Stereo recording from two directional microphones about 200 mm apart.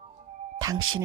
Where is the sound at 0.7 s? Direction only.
90° right.